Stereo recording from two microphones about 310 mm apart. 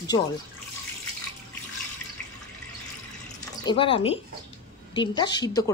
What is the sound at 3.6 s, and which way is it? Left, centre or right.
Speech, centre.